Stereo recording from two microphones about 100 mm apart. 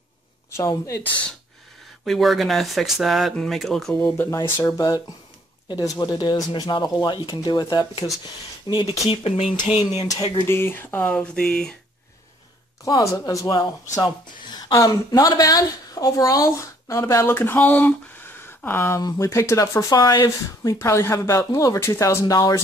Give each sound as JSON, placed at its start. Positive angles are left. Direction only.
{"t": 0.5, "sound": "speech", "side_deg": 30}
{"t": 2.0, "sound": "speech", "side_deg": 0}
{"t": 4.0, "sound": "speech", "side_deg": 25}
{"t": 4.4, "sound": "speech", "side_deg": 40}
{"t": 9.0, "sound": "speech", "side_deg": 80}
{"t": 10.4, "sound": "speech", "side_deg": 25}
{"t": 12.8, "sound": "a woman's voice", "side_deg": 35}
{"t": 18.9, "sound": "speech", "side_deg": 35}